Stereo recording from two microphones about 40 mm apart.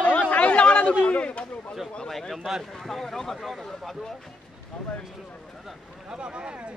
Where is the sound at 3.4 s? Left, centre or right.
Centre.